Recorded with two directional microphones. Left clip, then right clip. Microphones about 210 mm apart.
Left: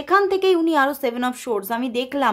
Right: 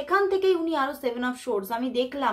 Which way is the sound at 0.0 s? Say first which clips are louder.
Left 5 dB; 40° left (ahead or behind).